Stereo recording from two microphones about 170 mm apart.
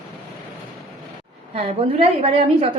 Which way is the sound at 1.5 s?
35° right (ahead or behind).